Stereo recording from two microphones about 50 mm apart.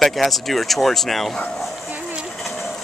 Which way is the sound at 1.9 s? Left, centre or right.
Right.